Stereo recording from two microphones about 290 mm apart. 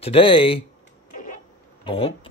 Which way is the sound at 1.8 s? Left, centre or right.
Centre.